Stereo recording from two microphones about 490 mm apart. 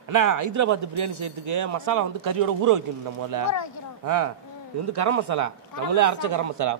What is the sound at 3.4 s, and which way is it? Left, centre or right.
Speech, left.